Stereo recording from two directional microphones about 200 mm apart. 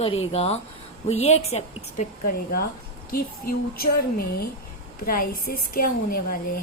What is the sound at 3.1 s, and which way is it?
A woman's voice, 50° left (ahead or behind).